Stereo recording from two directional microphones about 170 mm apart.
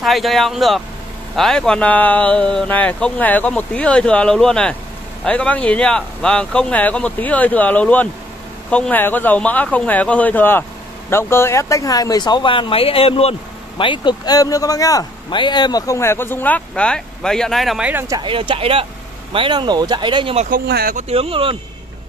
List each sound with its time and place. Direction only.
0.0 s speech: centre (ahead or behind)
18.2 s speech: 30° right (ahead or behind)
20.3 s speech: 55° right (ahead or behind)
21.1 s speech: 35° right (ahead or behind)